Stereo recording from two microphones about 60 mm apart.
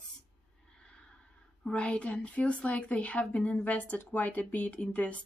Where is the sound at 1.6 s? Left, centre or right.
Centre.